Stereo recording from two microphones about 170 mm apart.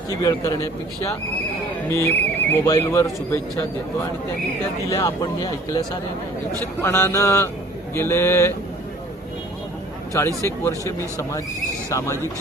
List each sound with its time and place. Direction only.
0.2 s speech: 20° left (ahead or behind)
1.9 s speech: 15° left (ahead or behind)
4.9 s speech: 15° left (ahead or behind)
6.8 s speech: 15° left (ahead or behind)
10.1 s speech: 15° left (ahead or behind)